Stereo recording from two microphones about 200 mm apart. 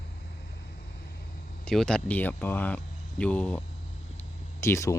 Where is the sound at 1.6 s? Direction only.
5° left (ahead or behind).